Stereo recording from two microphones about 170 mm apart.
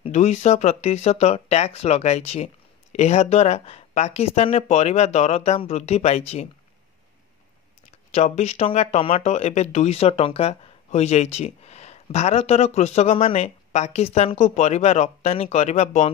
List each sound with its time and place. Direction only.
0.0 s speech: 40° left (ahead or behind)
8.1 s speech: 40° left (ahead or behind)